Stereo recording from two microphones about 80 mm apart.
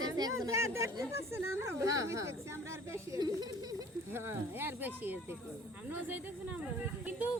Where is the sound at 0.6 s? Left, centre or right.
Right.